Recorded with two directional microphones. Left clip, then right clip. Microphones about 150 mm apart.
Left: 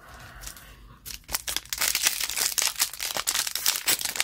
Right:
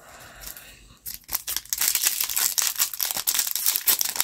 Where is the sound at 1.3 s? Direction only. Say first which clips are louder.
Even; 20° left (ahead or behind).